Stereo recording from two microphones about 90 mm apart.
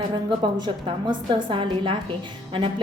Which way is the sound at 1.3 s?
60° right (ahead or behind).